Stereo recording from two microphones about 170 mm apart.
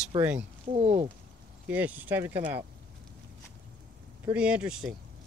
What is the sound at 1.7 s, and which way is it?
Speech, 10° right (ahead or behind).